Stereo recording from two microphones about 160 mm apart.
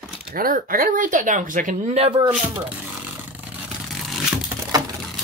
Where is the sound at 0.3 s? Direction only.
65° right (ahead or behind).